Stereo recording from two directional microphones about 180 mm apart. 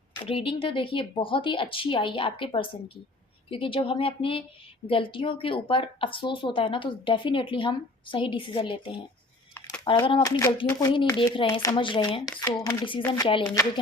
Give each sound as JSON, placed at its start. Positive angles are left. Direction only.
{"t": 0.1, "sound": "a woman's voice", "side_deg": 30}
{"t": 9.6, "sound": "a sound", "side_deg": 10}
{"t": 10.1, "sound": "speech", "side_deg": 25}
{"t": 13.0, "sound": "speech", "side_deg": 10}
{"t": 13.2, "sound": "speech", "side_deg": 25}